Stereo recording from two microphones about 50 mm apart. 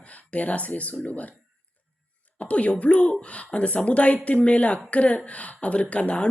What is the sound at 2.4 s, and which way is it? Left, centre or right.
Speech, left.